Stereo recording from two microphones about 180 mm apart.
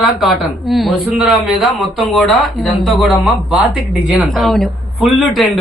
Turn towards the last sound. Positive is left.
turn(degrees=0)  # may be behind; listen again after turning